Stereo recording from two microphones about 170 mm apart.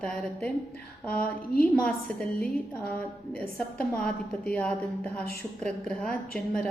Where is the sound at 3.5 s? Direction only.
5° left (ahead or behind).